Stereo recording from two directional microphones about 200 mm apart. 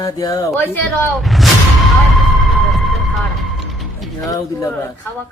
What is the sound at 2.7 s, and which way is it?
Music, centre (ahead or behind).